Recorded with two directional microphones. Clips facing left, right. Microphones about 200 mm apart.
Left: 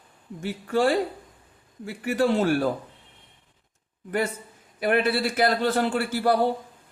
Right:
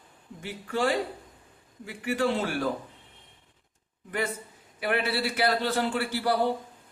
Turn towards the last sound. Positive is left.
turn(degrees=45)  # may be behind; listen again after turning